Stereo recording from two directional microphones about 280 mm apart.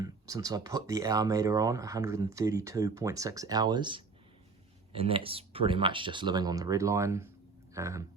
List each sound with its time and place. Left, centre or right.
0.0 s speech: centre